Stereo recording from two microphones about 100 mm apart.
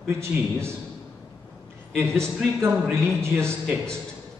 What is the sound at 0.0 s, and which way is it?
Speech, 25° right (ahead or behind).